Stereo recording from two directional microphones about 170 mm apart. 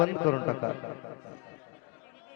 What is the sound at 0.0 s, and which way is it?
Speech, 15° left (ahead or behind).